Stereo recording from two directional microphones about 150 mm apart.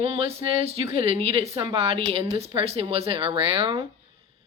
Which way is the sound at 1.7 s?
40° right (ahead or behind).